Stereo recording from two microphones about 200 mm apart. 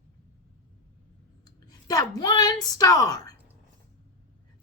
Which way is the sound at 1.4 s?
20° left (ahead or behind).